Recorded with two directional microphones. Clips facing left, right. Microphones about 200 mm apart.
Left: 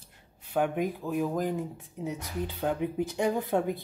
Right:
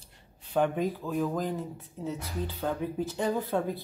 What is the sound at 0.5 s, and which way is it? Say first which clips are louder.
Speech: right 1 dB; 10° left (ahead or behind).